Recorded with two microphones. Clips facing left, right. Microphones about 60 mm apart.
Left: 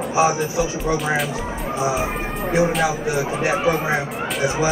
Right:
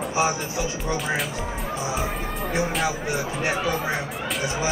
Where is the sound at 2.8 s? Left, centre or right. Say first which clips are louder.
Left 5 dB; left.